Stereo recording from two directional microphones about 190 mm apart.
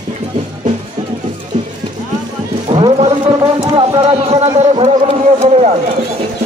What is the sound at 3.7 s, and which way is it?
Speech, 30° right (ahead or behind).